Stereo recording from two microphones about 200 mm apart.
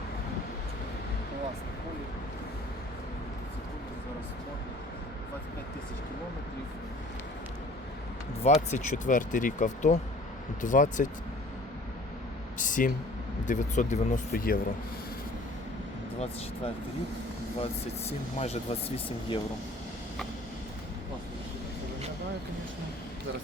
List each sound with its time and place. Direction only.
8.4 s speech: 35° left (ahead or behind)
12.5 s speech: 40° left (ahead or behind)
18.3 s speech: 30° left (ahead or behind)